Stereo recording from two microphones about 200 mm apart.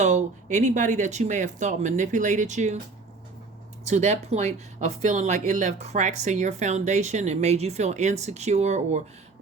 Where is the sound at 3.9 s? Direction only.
35° right (ahead or behind).